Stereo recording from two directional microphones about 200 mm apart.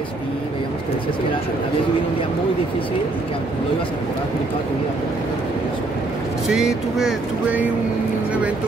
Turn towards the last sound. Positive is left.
turn(degrees=-5)  # may be behind; listen again after turning